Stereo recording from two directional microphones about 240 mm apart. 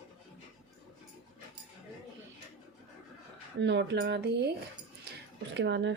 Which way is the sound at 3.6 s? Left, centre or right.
Right.